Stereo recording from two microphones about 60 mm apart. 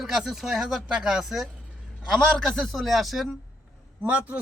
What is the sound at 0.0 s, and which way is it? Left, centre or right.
Speech, centre.